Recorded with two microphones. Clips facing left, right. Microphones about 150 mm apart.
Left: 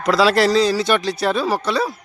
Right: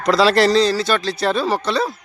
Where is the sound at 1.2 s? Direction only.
5° left (ahead or behind).